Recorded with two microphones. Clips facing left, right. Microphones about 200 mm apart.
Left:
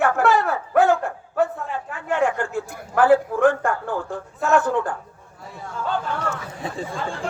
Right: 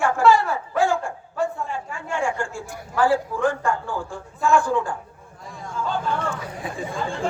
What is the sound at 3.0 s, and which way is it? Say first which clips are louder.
A man's voice: left 4 dB; 55° left (ahead or behind).